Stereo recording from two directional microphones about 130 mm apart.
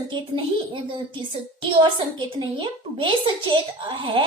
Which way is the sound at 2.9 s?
40° right (ahead or behind).